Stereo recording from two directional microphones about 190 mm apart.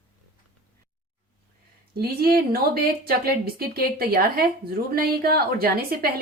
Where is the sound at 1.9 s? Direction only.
55° right (ahead or behind).